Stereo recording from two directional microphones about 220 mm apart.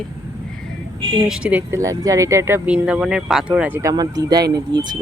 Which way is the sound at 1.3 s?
5° right (ahead or behind).